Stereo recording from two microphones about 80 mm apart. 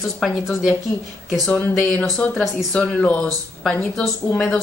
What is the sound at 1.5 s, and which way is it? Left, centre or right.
A woman's voice, centre.